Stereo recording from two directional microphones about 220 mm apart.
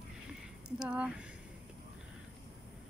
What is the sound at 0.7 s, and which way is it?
Speech, 5° right (ahead or behind).